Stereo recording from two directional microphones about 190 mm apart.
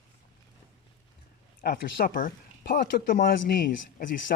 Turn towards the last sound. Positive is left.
turn(degrees=45)  # may be behind; listen again after turning